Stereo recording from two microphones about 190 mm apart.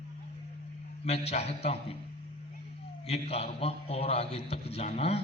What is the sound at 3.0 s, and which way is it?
A man's voice, 30° left (ahead or behind).